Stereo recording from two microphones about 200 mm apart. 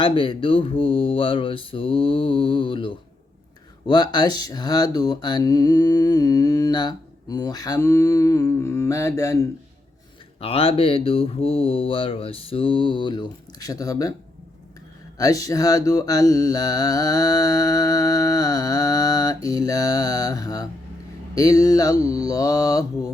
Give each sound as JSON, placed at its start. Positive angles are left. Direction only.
{"t": 0.0, "sound": "speech", "side_deg": 25}
{"t": 10.4, "sound": "speech", "side_deg": 30}
{"t": 15.2, "sound": "speech", "side_deg": 15}